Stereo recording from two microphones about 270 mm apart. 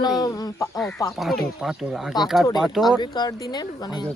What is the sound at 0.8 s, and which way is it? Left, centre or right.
Speech, centre.